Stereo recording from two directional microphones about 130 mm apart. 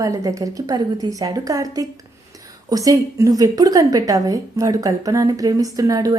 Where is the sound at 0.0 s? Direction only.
25° right (ahead or behind).